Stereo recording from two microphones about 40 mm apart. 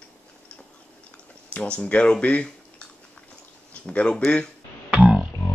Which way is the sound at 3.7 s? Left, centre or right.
Left.